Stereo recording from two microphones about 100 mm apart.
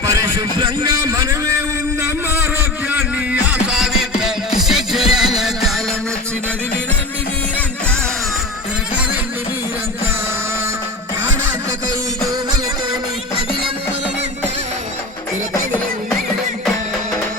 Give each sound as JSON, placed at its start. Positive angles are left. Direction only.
{"t": 0.0, "sound": "a man's voice", "side_deg": -35}
{"t": 2.0, "sound": "a sound", "side_deg": -25}
{"t": 3.4, "sound": "music", "side_deg": -10}